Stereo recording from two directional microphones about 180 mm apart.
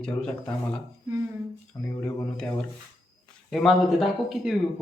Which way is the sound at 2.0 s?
5° left (ahead or behind).